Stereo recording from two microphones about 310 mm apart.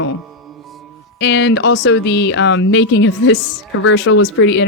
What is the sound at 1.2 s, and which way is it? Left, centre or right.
Speech, left.